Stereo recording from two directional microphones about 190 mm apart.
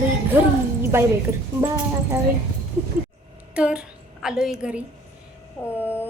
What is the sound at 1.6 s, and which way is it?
Speech, 20° right (ahead or behind).